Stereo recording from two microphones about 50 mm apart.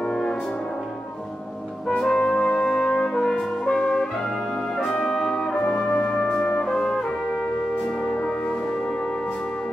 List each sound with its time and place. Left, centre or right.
0.0 s music: centre
2.0 s music: centre
4.8 s trumpet: centre
5.3 s brass instrument: centre
7.0 s music: left